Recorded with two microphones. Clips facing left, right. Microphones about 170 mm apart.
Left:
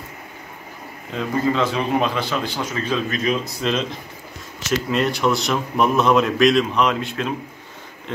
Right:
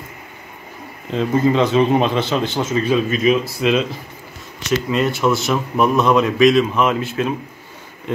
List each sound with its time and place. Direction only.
1.1 s a man's voice: 20° right (ahead or behind)
2.8 s a man's voice: 10° right (ahead or behind)